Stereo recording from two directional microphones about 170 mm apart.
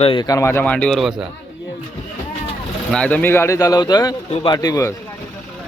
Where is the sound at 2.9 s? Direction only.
10° left (ahead or behind).